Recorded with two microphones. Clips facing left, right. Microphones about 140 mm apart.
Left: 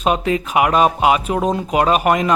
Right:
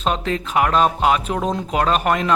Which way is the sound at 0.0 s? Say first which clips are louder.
Left 4 dB; 10° left (ahead or behind).